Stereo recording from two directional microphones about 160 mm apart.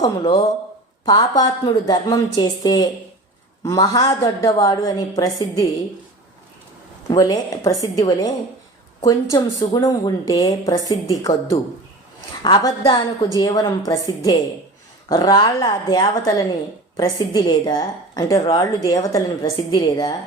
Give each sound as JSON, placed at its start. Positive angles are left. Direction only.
{"t": 1.0, "sound": "a woman's voice", "side_deg": 25}
{"t": 7.1, "sound": "a woman's voice", "side_deg": 25}